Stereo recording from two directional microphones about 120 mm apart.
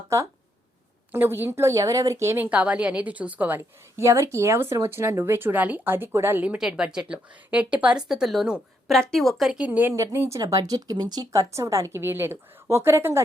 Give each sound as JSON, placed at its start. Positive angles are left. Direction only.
{"t": 1.1, "sound": "speech", "side_deg": -15}